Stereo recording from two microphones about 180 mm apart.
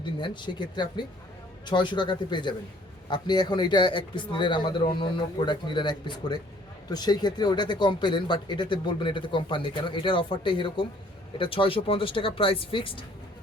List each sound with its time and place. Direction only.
0.0 s speech: 25° left (ahead or behind)